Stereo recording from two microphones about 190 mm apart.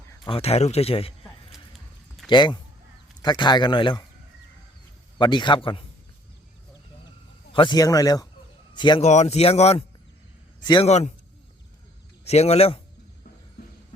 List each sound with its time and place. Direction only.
0.3 s speech: 30° left (ahead or behind)
1.5 s horse: 5° right (ahead or behind)
2.3 s a man's voice: 25° left (ahead or behind)
5.1 s a man's voice: 25° left (ahead or behind)
7.5 s a man's voice: 25° left (ahead or behind)
9.0 s a man's voice: 35° left (ahead or behind)
10.8 s speech: 35° left (ahead or behind)
12.2 s speech: 35° left (ahead or behind)